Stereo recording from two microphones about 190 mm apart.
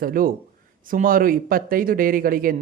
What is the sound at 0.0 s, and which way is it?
Speech, 50° right (ahead or behind).